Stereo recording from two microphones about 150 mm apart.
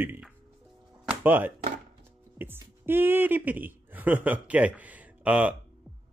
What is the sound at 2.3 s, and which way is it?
Speech, 15° right (ahead or behind).